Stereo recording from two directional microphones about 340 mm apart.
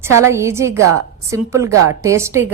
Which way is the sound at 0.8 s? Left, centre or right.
Right.